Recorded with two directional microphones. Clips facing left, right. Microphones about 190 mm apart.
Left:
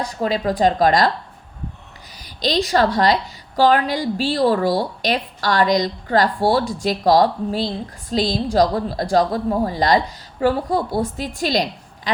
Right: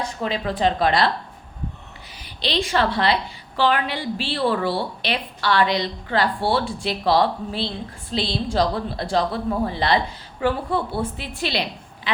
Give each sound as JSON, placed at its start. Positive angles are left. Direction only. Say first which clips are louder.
{"t": 0.0, "sound": "a woman's voice", "louder": "left 4 dB", "side_deg": 40}
{"t": 2.1, "sound": "a woman's voice", "louder": "left 4 dB", "side_deg": 40}